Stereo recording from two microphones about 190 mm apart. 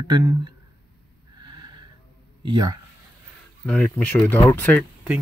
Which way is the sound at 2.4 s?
20° right (ahead or behind).